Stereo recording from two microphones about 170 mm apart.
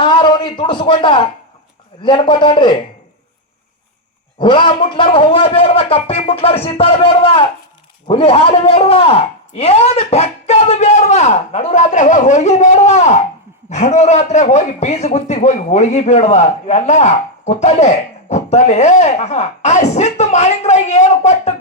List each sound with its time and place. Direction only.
0.0 s a man's voice: 30° left (ahead or behind)
4.4 s a man's voice: 30° left (ahead or behind)